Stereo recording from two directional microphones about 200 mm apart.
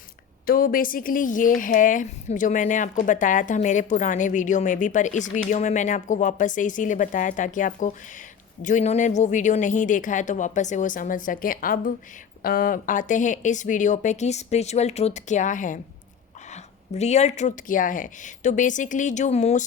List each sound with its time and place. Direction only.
0.4 s speech: 45° left (ahead or behind)